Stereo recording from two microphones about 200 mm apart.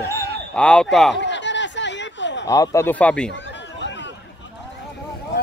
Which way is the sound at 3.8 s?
65° left (ahead or behind).